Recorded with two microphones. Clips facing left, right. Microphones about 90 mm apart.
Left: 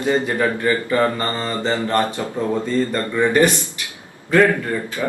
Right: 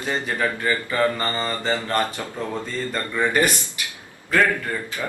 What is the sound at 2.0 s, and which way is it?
Speech, 15° left (ahead or behind).